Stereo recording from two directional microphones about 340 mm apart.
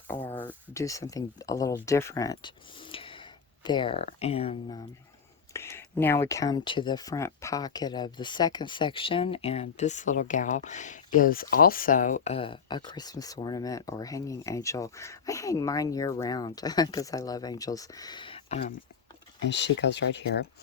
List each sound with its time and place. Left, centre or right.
0.1 s speech: centre
2.9 s a sound: centre
3.6 s speech: centre
19.5 s speech: left